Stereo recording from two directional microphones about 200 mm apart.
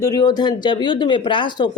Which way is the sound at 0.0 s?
20° left (ahead or behind).